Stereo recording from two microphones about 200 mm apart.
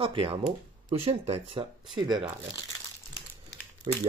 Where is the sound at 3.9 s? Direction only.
25° right (ahead or behind).